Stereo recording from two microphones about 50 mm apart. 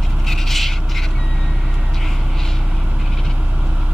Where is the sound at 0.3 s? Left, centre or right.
Centre.